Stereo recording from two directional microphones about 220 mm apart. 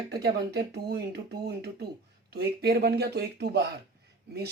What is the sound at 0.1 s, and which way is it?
Speech, 45° right (ahead or behind).